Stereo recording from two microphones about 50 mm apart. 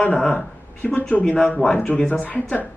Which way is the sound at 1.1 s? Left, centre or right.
Left.